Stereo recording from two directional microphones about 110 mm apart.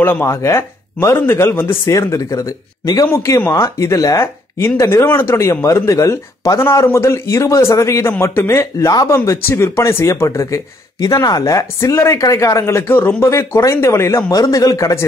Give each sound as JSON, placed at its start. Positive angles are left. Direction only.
{"t": 0.0, "sound": "speech", "side_deg": 20}